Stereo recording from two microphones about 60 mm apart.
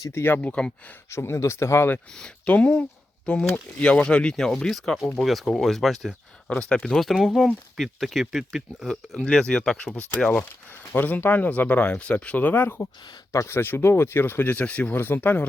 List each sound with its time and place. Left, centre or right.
0.1 s speech: left
1.1 s speech: left
2.1 s speech: centre
6.5 s speech: centre
8.9 s speech: centre
9.9 s speech: left
13.3 s speech: left
14.9 s speech: left